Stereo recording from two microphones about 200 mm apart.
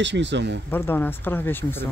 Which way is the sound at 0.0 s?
60° right (ahead or behind).